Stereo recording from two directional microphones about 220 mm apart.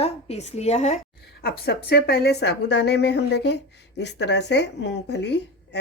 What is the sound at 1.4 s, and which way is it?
Speech, 45° left (ahead or behind).